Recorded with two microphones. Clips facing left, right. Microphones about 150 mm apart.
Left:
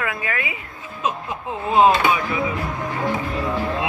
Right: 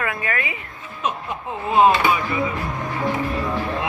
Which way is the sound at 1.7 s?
15° left (ahead or behind).